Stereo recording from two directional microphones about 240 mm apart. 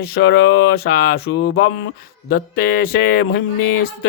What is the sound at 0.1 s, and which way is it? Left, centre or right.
Speech, left.